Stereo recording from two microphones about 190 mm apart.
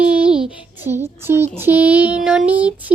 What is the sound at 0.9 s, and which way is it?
Speech, 10° right (ahead or behind).